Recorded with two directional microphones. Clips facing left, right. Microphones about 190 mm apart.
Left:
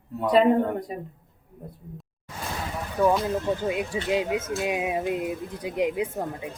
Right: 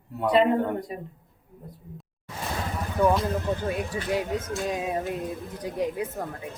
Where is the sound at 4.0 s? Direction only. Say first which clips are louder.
Left 2 dB; 20° left (ahead or behind).